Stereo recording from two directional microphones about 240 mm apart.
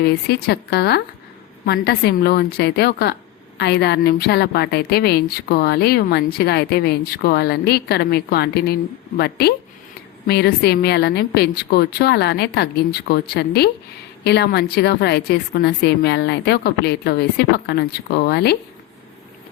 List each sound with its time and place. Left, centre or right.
0.0 s a woman's voice: left